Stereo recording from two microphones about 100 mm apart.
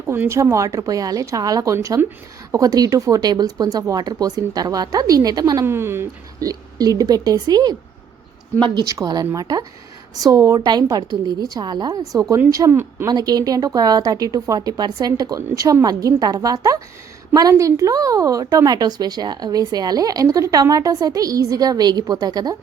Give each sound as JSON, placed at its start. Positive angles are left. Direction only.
{"t": 0.0, "sound": "speech", "side_deg": -25}
{"t": 5.6, "sound": "speech", "side_deg": -25}
{"t": 6.4, "sound": "speech", "side_deg": -40}
{"t": 10.3, "sound": "speech", "side_deg": -30}
{"t": 10.6, "sound": "speech", "side_deg": -40}
{"t": 13.1, "sound": "speech", "side_deg": -40}